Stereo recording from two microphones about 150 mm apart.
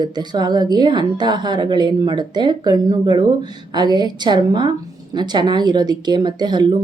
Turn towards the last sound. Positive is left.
turn(degrees=-30)  # may be behind; listen again after turning